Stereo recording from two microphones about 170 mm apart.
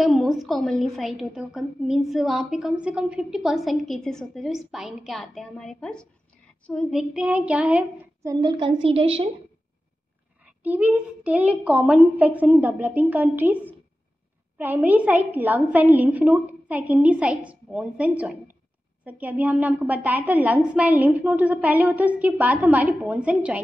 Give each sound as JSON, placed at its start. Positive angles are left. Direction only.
{"t": 0.0, "sound": "a woman's voice", "side_deg": 0}
{"t": 8.3, "sound": "a woman's voice", "side_deg": -25}
{"t": 10.4, "sound": "a woman's voice", "side_deg": -10}